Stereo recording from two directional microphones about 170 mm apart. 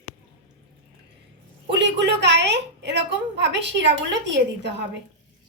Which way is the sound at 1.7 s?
90° right.